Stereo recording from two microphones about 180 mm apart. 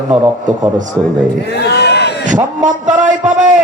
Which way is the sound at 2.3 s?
45° right (ahead or behind).